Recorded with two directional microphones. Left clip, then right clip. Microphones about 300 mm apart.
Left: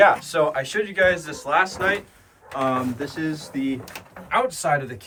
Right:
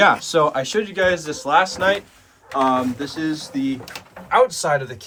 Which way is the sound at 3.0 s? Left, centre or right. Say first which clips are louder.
Right 3 dB; centre.